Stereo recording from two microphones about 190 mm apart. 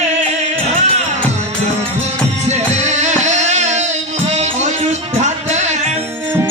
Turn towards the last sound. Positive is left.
turn(degrees=-40)  # may be behind; listen again after turning